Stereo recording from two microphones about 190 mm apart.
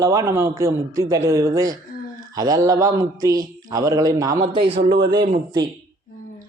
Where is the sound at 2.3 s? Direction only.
20° right (ahead or behind).